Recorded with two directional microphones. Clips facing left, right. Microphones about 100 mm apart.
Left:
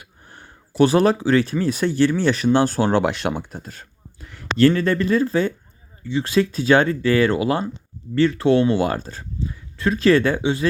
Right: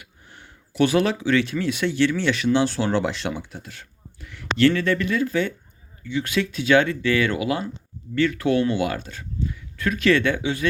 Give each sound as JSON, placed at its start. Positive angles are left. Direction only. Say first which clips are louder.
{"t": 0.0, "sound": "speech", "louder": "left 2 dB", "side_deg": 40}